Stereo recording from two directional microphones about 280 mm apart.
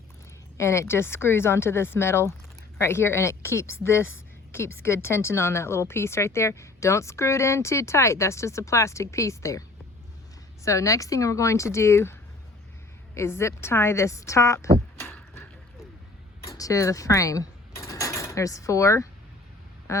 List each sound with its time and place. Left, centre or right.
0.5 s speech: centre
13.1 s speech: centre
16.5 s a sound: centre
19.9 s quack: centre